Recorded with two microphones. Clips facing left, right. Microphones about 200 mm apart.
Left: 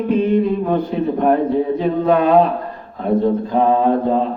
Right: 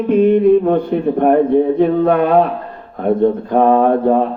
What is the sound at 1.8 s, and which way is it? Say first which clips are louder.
Mantra: right 3 dB; 60° right (ahead or behind).